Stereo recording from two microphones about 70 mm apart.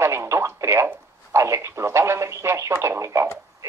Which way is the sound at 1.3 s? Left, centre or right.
Right.